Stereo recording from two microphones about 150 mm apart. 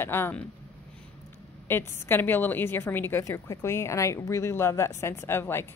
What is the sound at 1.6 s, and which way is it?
A woman's voice, 15° left (ahead or behind).